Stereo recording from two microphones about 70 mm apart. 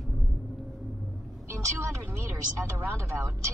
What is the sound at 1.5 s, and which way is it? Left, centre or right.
Vehicle, right.